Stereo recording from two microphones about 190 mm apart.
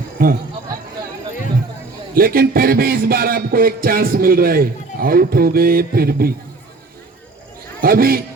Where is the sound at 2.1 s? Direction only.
50° right (ahead or behind).